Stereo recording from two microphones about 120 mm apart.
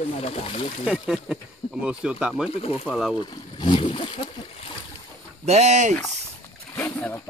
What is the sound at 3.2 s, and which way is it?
Speech, 40° left (ahead or behind).